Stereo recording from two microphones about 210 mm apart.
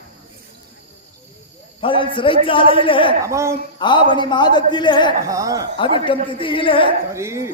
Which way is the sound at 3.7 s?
20° left (ahead or behind).